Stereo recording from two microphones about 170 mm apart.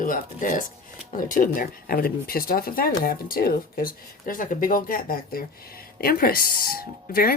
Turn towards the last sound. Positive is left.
turn(degrees=60)  # may be behind; listen again after turning